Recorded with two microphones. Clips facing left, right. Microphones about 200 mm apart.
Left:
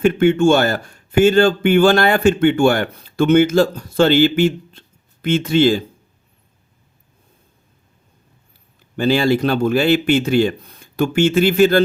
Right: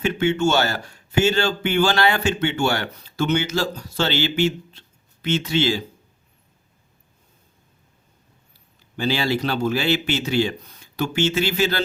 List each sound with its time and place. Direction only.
0.0 s speech: 50° left (ahead or behind)
9.0 s speech: 50° left (ahead or behind)